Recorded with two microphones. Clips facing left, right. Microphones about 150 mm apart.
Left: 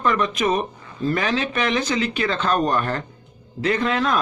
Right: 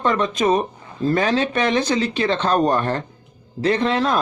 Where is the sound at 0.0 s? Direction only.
30° right (ahead or behind).